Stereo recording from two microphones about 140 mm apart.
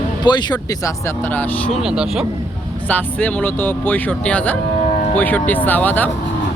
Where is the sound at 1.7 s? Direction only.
5° right (ahead or behind).